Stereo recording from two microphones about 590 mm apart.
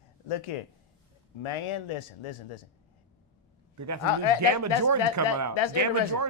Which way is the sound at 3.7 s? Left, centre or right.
Right.